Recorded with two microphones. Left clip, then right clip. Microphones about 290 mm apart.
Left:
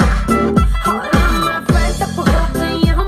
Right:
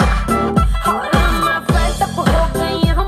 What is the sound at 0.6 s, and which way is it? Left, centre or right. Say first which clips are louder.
Music: even; right.